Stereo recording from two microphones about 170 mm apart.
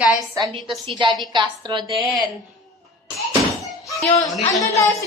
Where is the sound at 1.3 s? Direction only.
25° right (ahead or behind).